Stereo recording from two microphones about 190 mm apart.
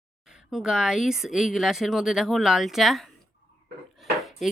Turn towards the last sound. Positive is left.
turn(degrees=0)  # may be behind; listen again after turning